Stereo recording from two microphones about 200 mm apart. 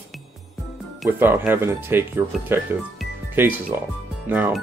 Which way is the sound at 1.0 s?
10° right (ahead or behind).